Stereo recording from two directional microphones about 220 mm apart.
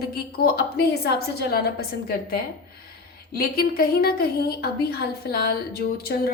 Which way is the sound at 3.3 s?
45° left (ahead or behind).